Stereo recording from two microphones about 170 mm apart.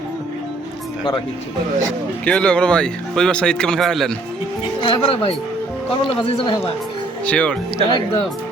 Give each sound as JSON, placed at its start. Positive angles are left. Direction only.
{"t": 2.2, "sound": "speech", "side_deg": 5}
{"t": 4.8, "sound": "a man's voice", "side_deg": 35}
{"t": 7.3, "sound": "speech", "side_deg": 5}
{"t": 7.9, "sound": "speech", "side_deg": 25}